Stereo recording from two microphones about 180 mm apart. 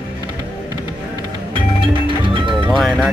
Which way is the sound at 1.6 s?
25° right (ahead or behind).